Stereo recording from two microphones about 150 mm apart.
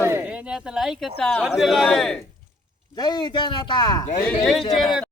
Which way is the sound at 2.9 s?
30° left (ahead or behind).